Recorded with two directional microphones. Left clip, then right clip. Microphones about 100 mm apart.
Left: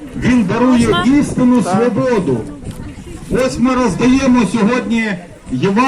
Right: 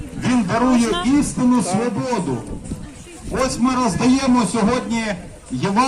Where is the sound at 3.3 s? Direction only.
35° right (ahead or behind).